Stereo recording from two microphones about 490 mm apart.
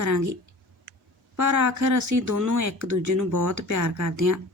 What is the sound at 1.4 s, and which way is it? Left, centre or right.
Speech, right.